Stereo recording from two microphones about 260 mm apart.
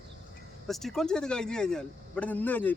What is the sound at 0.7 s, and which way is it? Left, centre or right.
A man's voice, centre.